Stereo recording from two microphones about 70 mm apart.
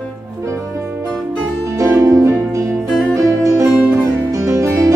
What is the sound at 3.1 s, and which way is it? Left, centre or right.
Music, right.